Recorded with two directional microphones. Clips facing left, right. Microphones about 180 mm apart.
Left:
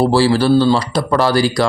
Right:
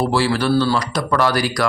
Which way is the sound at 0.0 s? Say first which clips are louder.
Left 5 dB; 30° left (ahead or behind).